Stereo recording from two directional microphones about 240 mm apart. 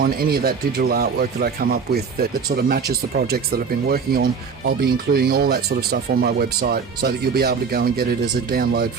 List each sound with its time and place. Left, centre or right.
0.0 s speech: right